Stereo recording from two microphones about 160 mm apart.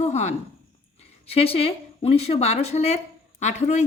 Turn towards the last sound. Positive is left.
turn(degrees=45)  # may be behind; listen again after turning